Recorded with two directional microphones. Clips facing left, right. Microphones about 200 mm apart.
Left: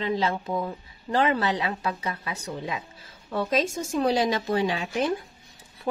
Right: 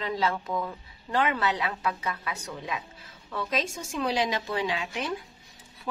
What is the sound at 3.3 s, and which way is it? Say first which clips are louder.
A woman's voice: left 5 dB; 40° left (ahead or behind).